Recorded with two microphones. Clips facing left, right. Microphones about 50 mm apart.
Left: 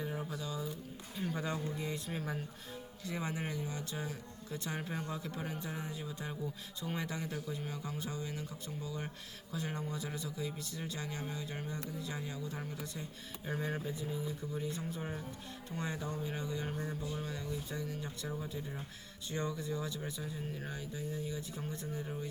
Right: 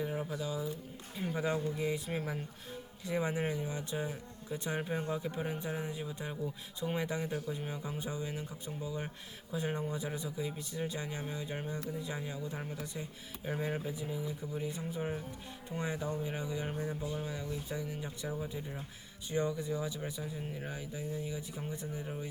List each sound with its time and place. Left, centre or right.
0.0 s a sound: centre
1.3 s speech: centre
16.7 s speech: centre
22.0 s speech: centre